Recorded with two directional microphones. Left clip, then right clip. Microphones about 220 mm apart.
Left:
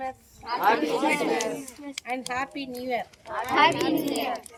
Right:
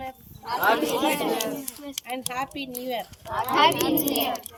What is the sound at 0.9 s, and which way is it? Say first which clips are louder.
Speech: even; 30° right (ahead or behind).